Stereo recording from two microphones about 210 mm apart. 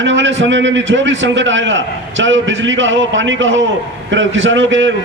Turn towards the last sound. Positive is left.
turn(degrees=-60)  # may be behind; listen again after turning